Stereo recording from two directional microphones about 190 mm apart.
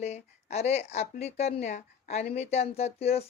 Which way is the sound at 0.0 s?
35° left (ahead or behind).